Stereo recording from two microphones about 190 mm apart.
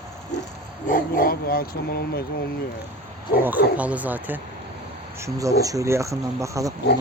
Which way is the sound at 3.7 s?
5° right (ahead or behind).